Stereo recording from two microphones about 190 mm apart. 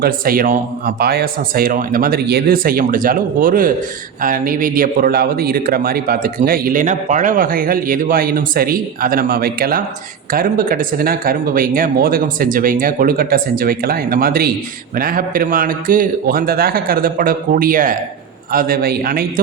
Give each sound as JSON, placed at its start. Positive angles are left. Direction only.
{"t": 0.0, "sound": "a man's voice", "side_deg": -50}